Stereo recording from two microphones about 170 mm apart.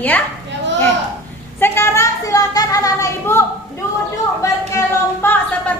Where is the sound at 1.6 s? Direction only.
15° left (ahead or behind).